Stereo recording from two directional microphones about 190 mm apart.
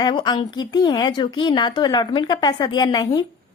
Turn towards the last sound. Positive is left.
turn(degrees=20)  # may be behind; listen again after turning